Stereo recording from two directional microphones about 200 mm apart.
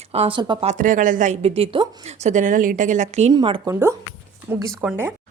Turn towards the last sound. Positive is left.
turn(degrees=-10)  # may be behind; listen again after turning